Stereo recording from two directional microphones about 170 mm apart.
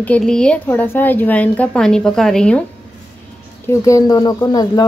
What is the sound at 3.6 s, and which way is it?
Speech, 20° left (ahead or behind).